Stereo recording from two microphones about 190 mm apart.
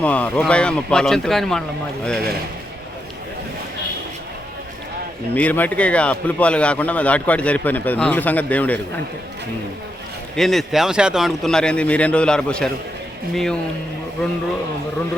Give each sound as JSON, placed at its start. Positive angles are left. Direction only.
{"t": 0.0, "sound": "speech", "side_deg": 5}
{"t": 5.3, "sound": "speech", "side_deg": 10}
{"t": 10.3, "sound": "speech", "side_deg": 0}